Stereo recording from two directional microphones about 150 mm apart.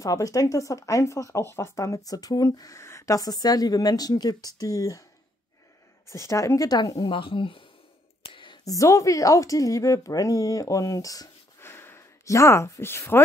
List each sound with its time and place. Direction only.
0.0 s speech: 25° left (ahead or behind)
6.0 s speech: 20° left (ahead or behind)